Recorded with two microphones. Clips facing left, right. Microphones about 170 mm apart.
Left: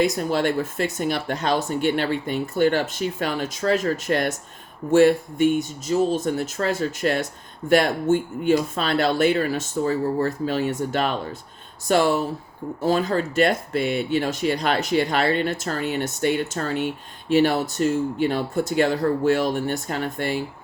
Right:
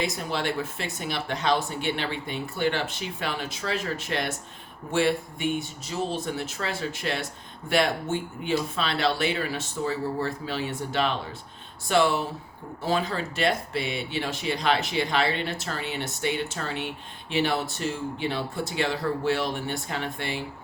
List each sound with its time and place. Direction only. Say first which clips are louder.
0.0 s speech: left 8 dB; 45° left (ahead or behind)